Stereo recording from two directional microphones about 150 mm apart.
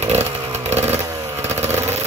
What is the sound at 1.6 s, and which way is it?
Vehicle, 45° right (ahead or behind).